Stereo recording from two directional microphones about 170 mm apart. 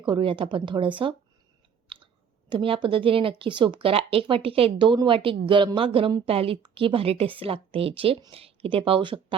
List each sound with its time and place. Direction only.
0.0 s speech: 30° right (ahead or behind)
1.9 s clicking: 30° right (ahead or behind)
2.5 s a woman's voice: 30° right (ahead or behind)